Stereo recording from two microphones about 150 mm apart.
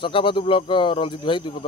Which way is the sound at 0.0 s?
35° left (ahead or behind).